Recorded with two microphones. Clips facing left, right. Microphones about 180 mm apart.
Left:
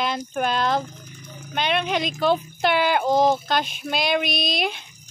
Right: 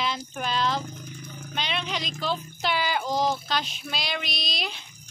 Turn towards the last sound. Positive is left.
turn(degrees=55)  # may be behind; listen again after turning